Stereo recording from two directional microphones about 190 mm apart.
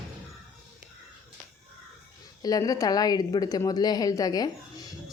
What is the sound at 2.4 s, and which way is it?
A woman's voice, 20° left (ahead or behind).